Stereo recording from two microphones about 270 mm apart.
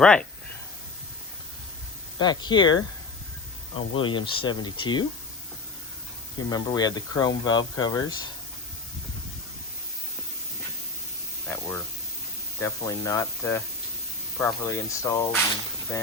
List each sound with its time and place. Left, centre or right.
0.0 s speech: centre
2.1 s speech: centre
6.5 s speech: centre
11.5 s speech: centre